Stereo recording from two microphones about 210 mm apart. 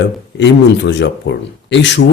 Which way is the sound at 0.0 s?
55° left (ahead or behind).